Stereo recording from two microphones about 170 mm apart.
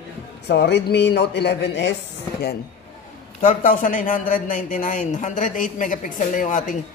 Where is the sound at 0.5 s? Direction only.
85° left.